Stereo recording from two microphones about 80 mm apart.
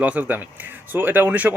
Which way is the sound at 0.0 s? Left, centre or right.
Right.